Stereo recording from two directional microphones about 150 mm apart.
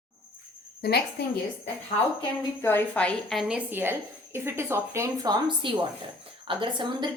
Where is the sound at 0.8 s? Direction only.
90° left.